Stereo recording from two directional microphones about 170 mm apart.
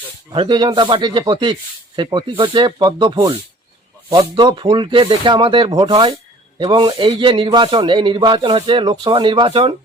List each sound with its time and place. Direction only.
0.3 s a man's voice: 30° right (ahead or behind)